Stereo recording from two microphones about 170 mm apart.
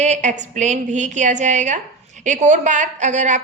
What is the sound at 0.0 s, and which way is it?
A woman's voice, 45° right (ahead or behind).